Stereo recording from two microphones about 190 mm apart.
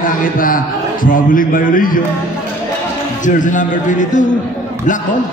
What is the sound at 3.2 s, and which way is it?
Speech, 40° left (ahead or behind).